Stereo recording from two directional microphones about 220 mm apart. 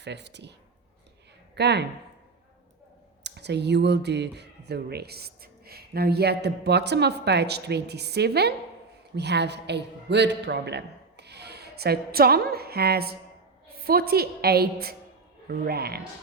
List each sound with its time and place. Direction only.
0.0 s speech: 50° right (ahead or behind)
1.5 s speech: 50° right (ahead or behind)
3.2 s a man's voice: 50° right (ahead or behind)